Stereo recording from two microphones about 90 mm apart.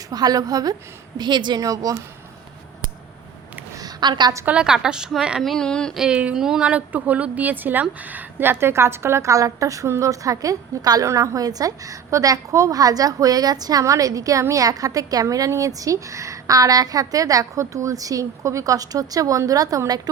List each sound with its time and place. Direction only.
0.1 s speech: 45° right (ahead or behind)
1.2 s speech: 55° right (ahead or behind)
3.8 s a sound: 50° right (ahead or behind)
4.4 s a woman's voice: 10° right (ahead or behind)
5.4 s speech: 5° left (ahead or behind)
6.0 s speech: 10° right (ahead or behind); by 19.8 s 40° right (ahead or behind)